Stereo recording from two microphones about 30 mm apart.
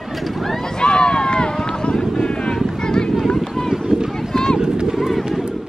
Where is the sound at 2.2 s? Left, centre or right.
Left.